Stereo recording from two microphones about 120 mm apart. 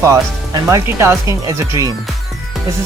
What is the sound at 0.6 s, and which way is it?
Speech, 20° right (ahead or behind).